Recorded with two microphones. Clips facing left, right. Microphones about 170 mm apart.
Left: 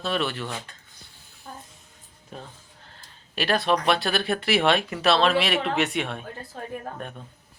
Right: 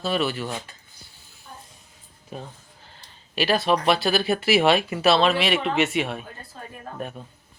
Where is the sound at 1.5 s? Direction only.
50° left (ahead or behind).